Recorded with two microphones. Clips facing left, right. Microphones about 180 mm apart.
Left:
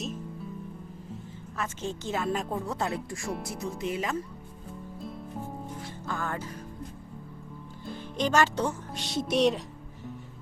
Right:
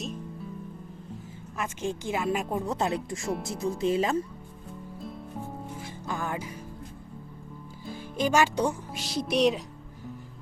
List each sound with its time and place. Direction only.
1.5 s speech: 15° right (ahead or behind); by 4.2 s 30° right (ahead or behind)
6.1 s speech: 15° right (ahead or behind)
7.9 s music: 10° right (ahead or behind)
9.0 s speech: centre (ahead or behind)